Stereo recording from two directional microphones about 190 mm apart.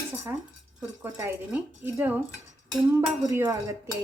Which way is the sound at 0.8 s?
10° right (ahead or behind).